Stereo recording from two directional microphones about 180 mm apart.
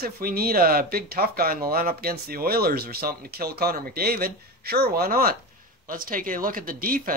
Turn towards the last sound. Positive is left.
turn(degrees=-50)  # may be behind; listen again after turning